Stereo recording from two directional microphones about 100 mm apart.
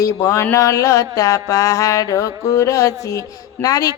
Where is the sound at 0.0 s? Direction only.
30° left (ahead or behind).